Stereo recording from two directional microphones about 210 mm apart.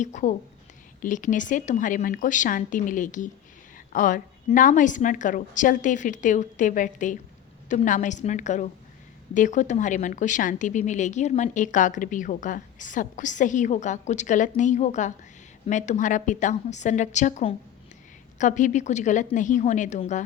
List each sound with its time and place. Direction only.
0.0 s speech: 35° left (ahead or behind)